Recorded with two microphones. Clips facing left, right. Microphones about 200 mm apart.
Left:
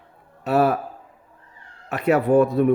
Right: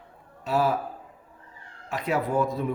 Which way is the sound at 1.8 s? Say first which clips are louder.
Left 8 dB; 65° left (ahead or behind).